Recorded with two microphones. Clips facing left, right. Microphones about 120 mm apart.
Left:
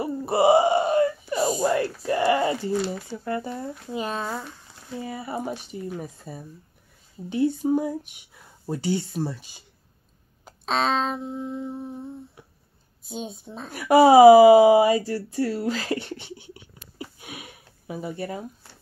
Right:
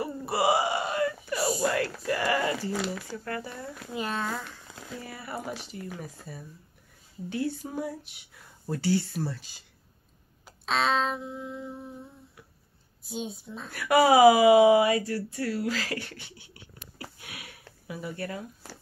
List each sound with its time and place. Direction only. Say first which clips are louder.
0.0 s a sound: left 6 dB; 25° left (ahead or behind)
1.7 s a woman's voice: left 4 dB; 25° left (ahead or behind)
12.4 s a sound: left 3 dB; 25° left (ahead or behind)
13.1 s a woman's voice: left 1 dB; 25° left (ahead or behind)
17.2 s sniff: left 5 dB; 20° left (ahead or behind)
17.8 s a woman's voice: left 4 dB; 25° left (ahead or behind)